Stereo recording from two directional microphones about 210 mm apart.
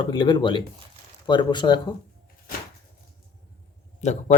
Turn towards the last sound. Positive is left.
turn(degrees=35)  # may be behind; listen again after turning